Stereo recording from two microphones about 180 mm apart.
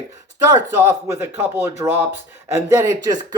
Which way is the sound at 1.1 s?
10° right (ahead or behind).